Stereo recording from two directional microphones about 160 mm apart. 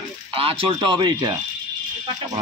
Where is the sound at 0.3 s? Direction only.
35° right (ahead or behind).